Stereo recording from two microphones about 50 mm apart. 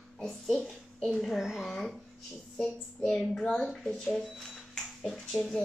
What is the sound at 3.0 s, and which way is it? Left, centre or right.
Speech, centre.